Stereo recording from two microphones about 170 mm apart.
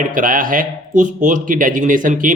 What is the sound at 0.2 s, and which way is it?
Speech, 50° right (ahead or behind).